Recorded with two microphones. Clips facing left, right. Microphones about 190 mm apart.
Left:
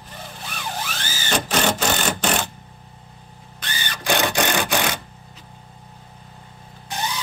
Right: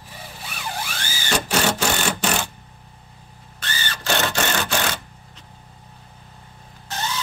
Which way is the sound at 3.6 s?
15° left (ahead or behind).